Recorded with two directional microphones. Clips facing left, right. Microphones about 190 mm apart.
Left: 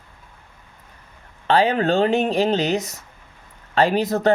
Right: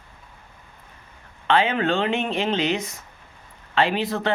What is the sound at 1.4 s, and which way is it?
Speech, 40° left (ahead or behind).